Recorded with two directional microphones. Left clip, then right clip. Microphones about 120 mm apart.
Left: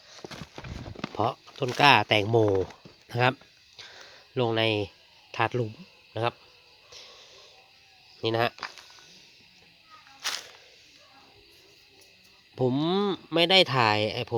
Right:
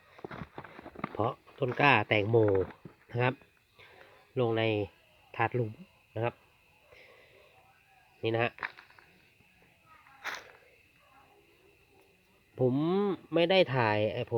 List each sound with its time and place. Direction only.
0.5 s clip-clop: 5° left (ahead or behind)
1.0 s speech: 10° left (ahead or behind)
4.4 s speech: 15° left (ahead or behind)
8.2 s speech: 15° left (ahead or behind)
12.5 s speech: 15° left (ahead or behind)